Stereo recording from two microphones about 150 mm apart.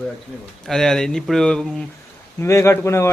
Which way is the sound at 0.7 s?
5° left (ahead or behind).